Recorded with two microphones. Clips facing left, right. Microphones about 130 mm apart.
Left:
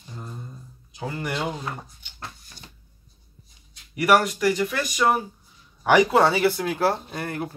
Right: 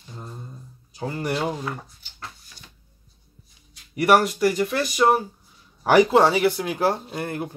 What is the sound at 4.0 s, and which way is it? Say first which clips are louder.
Speech: right 2 dB; 30° right (ahead or behind).